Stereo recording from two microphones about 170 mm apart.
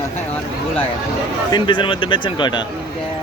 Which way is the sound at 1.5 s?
25° left (ahead or behind).